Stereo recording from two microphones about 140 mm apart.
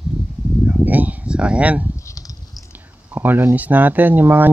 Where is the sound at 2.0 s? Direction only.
25° left (ahead or behind).